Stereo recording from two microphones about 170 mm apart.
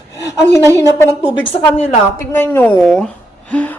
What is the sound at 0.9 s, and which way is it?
Speech, 30° left (ahead or behind).